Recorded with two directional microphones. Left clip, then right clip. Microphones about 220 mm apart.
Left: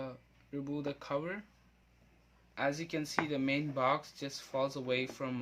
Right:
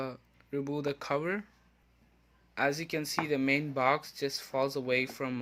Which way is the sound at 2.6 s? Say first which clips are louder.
Right 4 dB; 30° right (ahead or behind).